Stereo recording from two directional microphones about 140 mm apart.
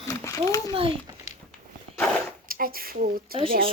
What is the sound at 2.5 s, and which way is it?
Speech, 90° right.